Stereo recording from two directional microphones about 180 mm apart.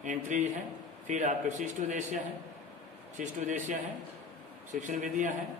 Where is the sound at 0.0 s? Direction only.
45° right (ahead or behind).